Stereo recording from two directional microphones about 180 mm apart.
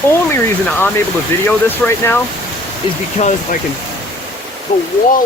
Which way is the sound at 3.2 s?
40° left (ahead or behind).